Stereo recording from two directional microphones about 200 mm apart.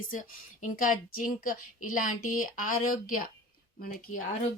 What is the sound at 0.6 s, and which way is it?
Speech, 40° left (ahead or behind).